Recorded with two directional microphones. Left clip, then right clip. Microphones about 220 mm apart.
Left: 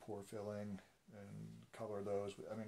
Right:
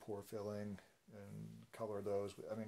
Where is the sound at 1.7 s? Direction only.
40° right (ahead or behind).